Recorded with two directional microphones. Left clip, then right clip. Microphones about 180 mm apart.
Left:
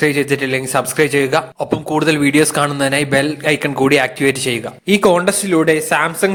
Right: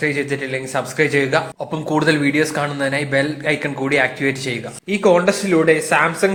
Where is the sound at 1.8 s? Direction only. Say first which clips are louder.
Left 1 dB; 25° left (ahead or behind).